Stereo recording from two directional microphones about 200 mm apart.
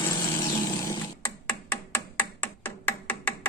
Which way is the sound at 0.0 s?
20° left (ahead or behind).